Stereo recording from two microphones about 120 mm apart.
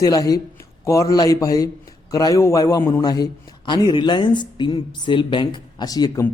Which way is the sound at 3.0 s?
35° left (ahead or behind).